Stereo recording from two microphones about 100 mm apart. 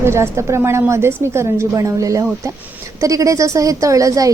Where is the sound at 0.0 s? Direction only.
25° right (ahead or behind).